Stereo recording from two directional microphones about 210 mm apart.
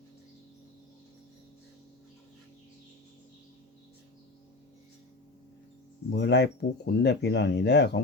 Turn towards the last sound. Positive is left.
turn(degrees=55)  # may be behind; listen again after turning